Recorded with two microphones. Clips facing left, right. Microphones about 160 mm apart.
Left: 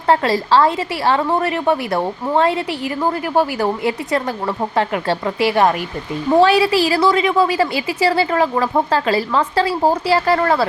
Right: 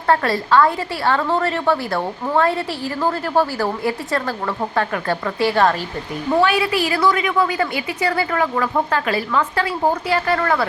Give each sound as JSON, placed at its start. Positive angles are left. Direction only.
{"t": 0.1, "sound": "a woman's voice", "side_deg": 25}
{"t": 6.4, "sound": "a woman's voice", "side_deg": 30}